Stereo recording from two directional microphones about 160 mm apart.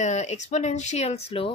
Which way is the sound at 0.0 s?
45° left (ahead or behind).